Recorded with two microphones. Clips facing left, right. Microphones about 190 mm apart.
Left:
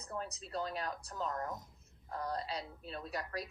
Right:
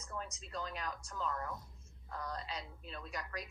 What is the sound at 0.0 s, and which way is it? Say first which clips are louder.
Speech: left 3 dB; 35° left (ahead or behind).